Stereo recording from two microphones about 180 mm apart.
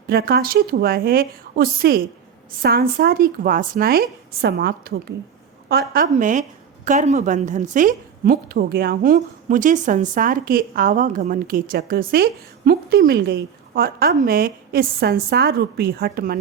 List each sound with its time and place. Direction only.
0.1 s a woman's voice: 60° right (ahead or behind)